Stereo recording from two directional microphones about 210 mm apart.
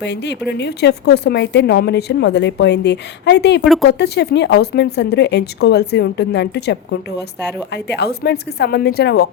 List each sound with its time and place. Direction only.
0.0 s a woman's voice: 55° left (ahead or behind)
3.6 s speech: centre (ahead or behind)
3.8 s a woman's voice: 50° left (ahead or behind)